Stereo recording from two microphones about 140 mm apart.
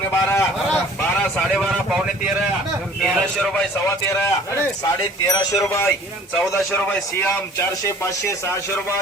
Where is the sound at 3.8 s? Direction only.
20° left (ahead or behind).